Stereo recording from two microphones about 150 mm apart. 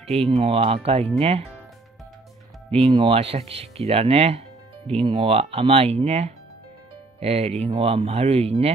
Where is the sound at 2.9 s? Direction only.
35° right (ahead or behind).